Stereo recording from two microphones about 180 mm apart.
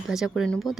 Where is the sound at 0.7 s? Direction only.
20° left (ahead or behind).